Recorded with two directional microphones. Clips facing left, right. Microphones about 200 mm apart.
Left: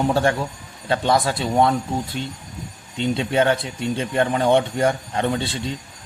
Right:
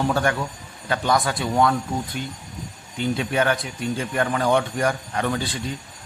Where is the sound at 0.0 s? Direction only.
25° left (ahead or behind).